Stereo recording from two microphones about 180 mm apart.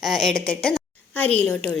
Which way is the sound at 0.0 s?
Centre (ahead or behind).